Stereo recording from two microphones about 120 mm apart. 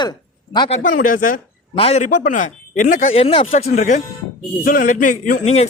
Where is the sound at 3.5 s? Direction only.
85° left.